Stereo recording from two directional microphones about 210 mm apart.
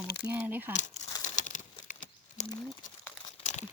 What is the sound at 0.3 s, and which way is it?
Speech, 10° right (ahead or behind).